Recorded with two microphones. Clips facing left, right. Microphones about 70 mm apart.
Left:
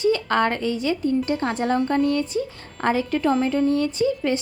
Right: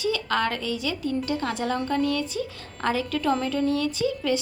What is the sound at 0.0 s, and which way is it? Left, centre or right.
A woman's voice, left.